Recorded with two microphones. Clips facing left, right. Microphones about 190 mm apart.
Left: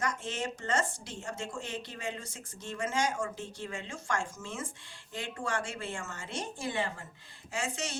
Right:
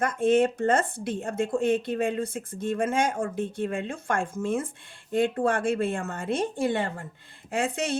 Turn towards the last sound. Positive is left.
turn(degrees=-55)  # may be behind; listen again after turning